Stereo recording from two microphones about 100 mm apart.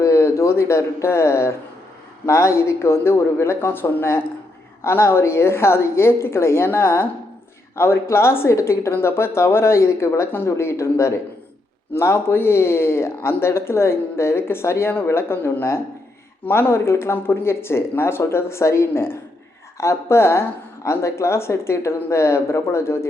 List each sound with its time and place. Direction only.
0.0 s speech: 30° left (ahead or behind)